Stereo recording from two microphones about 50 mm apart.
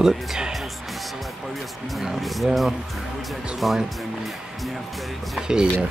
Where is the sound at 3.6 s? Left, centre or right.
Centre.